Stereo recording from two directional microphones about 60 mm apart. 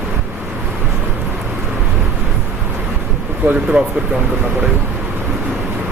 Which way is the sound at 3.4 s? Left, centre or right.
Right.